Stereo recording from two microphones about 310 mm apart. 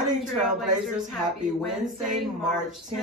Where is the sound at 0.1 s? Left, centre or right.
Right.